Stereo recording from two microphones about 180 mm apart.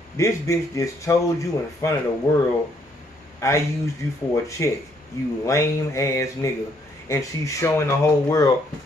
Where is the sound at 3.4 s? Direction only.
15° left (ahead or behind).